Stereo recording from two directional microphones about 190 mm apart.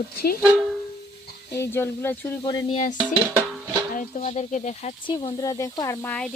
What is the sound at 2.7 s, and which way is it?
Speech, 40° left (ahead or behind).